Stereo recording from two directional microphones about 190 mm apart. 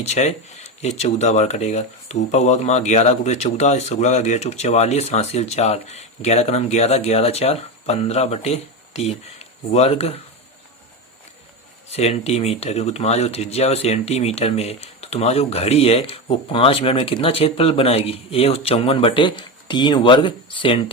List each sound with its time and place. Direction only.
0.0 s speech: 35° left (ahead or behind)
11.9 s speech: 35° left (ahead or behind)